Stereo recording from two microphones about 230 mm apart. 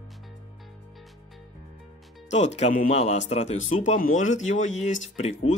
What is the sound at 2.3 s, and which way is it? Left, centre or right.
Speech, left.